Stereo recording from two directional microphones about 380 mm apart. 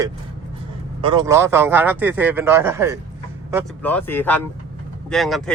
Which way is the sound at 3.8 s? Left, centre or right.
Centre.